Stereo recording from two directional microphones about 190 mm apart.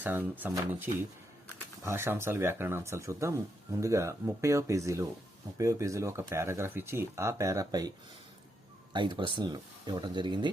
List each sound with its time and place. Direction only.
0.0 s speech: 10° right (ahead or behind)